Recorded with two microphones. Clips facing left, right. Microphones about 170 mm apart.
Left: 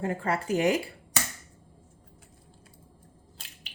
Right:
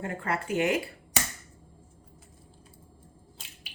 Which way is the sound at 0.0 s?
30° left (ahead or behind).